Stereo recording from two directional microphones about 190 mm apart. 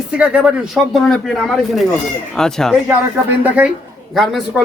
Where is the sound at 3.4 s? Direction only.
10° right (ahead or behind).